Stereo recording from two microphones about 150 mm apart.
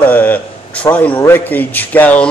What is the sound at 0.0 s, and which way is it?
Speech, 10° left (ahead or behind).